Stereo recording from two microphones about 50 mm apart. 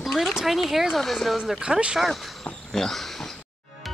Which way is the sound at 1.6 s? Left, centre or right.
Centre.